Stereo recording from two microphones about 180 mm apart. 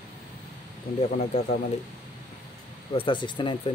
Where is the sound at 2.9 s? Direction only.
25° left (ahead or behind).